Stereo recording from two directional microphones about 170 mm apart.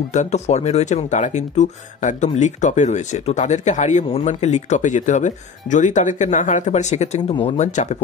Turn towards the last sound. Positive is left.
turn(degrees=40)  # may be behind; listen again after turning